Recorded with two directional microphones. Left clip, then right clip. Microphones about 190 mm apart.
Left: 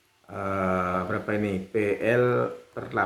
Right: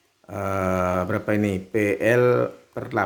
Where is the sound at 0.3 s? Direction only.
60° right (ahead or behind).